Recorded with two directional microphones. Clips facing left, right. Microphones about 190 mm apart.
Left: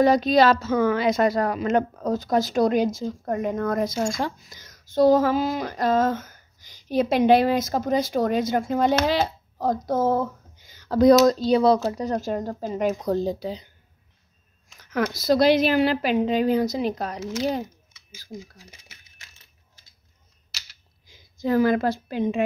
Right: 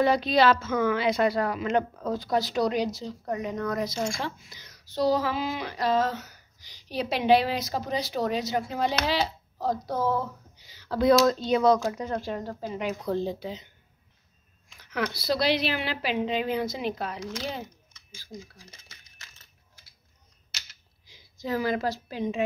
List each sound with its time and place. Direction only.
0.0 s a woman's voice: 45° left (ahead or behind)
14.7 s a sound: 45° left (ahead or behind)
15.1 s a woman's voice: 45° left (ahead or behind)
17.2 s speech: 5° left (ahead or behind)
18.7 s a sound: 15° left (ahead or behind)
21.1 s a woman's voice: 50° left (ahead or behind)